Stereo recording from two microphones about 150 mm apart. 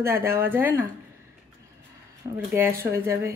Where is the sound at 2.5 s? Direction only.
15° right (ahead or behind).